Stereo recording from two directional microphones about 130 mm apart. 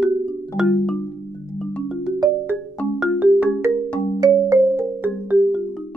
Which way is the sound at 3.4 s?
20° right (ahead or behind).